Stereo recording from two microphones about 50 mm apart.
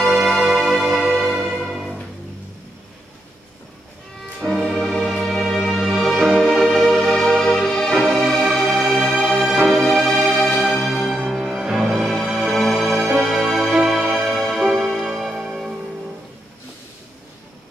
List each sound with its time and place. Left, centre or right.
0.0 s music: centre
4.4 s music: centre
7.9 s music: centre
9.8 s music: centre